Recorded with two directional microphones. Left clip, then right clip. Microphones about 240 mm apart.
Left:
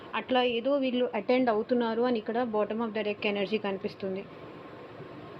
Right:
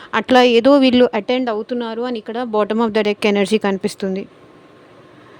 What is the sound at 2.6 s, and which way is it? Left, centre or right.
Speech, right.